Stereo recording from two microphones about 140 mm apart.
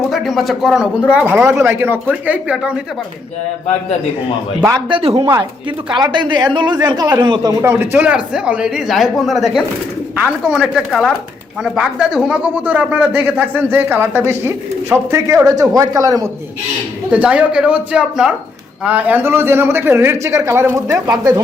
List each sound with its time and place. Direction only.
0.1 s speech: centre (ahead or behind)
4.7 s speech: 35° right (ahead or behind)
7.6 s speech: 15° right (ahead or behind)
17.1 s speech: 10° right (ahead or behind); by 21.4 s 30° right (ahead or behind)